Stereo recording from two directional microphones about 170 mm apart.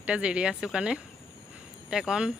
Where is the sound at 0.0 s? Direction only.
5° right (ahead or behind).